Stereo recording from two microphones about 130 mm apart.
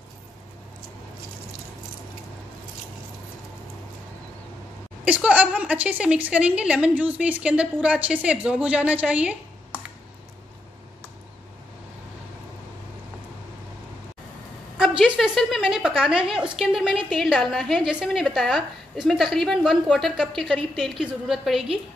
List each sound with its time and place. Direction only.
5.0 s a woman's voice: 10° right (ahead or behind)
14.8 s a woman's voice: centre (ahead or behind)